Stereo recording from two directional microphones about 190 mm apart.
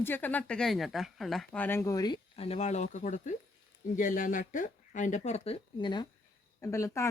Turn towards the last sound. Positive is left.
turn(degrees=15)  # may be behind; listen again after turning